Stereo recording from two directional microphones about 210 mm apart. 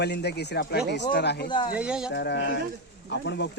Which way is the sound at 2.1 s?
55° left (ahead or behind).